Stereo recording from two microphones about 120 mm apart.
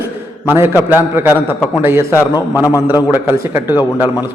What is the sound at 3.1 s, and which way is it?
Speech, 15° right (ahead or behind).